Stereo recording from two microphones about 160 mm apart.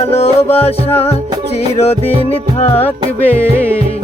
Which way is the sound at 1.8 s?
40° left (ahead or behind).